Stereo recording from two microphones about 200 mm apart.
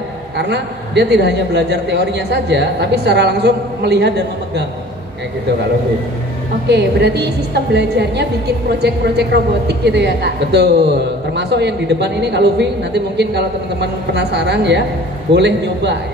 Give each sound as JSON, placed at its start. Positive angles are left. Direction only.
{"t": 0.4, "sound": "a woman's voice", "side_deg": -60}
{"t": 6.7, "sound": "a woman's voice", "side_deg": -55}